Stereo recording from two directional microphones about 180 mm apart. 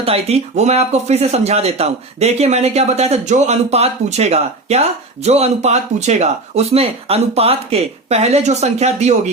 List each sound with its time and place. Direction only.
0.0 s speech: 35° right (ahead or behind)